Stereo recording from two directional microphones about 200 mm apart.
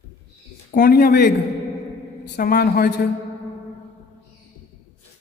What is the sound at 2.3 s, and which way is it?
Speech, 45° left (ahead or behind).